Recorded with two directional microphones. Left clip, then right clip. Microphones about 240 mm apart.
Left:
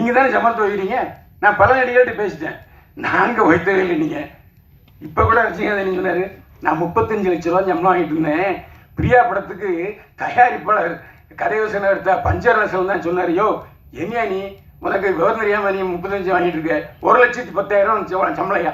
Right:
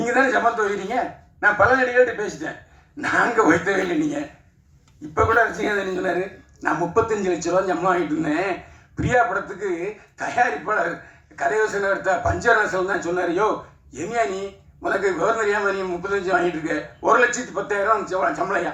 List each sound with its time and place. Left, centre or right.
0.0 s a man's voice: right